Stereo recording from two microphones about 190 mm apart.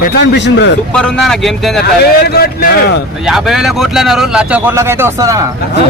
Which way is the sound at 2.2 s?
55° left (ahead or behind).